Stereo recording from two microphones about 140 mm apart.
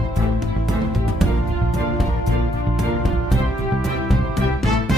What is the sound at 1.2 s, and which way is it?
Music, centre (ahead or behind).